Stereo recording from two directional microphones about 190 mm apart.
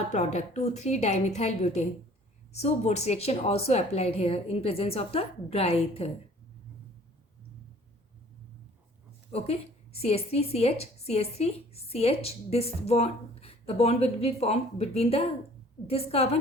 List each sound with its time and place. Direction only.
0.1 s a woman's voice: 40° left (ahead or behind)
9.3 s a woman's voice: 35° left (ahead or behind)